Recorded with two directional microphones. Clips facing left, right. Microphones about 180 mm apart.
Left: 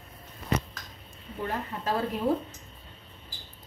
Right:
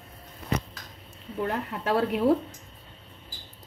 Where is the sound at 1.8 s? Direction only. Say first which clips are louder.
Right 5 dB; 70° right (ahead or behind).